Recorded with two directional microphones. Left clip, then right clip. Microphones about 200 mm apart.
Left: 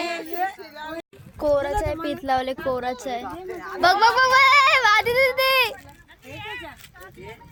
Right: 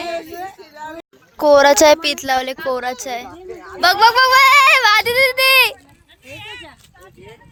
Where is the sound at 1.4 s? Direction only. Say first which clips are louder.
Right 12 dB; 30° right (ahead or behind).